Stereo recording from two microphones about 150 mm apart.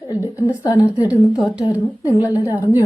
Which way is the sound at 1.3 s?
5° right (ahead or behind).